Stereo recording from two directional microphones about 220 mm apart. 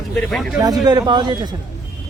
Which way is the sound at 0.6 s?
15° right (ahead or behind).